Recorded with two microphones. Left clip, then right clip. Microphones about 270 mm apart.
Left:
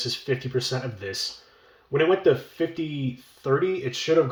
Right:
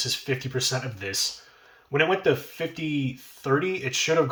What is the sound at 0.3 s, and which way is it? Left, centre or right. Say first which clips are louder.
Speech: left 1 dB; centre.